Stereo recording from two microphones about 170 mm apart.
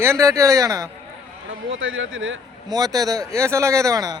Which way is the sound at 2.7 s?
20° right (ahead or behind).